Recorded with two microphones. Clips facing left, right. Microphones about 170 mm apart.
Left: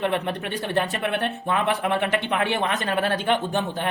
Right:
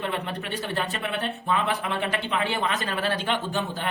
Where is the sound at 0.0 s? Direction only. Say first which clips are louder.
Left 5 dB; 60° left (ahead or behind).